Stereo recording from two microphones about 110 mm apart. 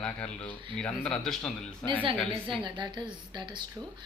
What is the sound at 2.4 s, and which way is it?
A woman's voice, 50° right (ahead or behind).